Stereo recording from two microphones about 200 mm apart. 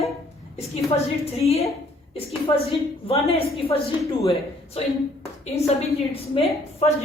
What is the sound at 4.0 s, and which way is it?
Speech, centre (ahead or behind).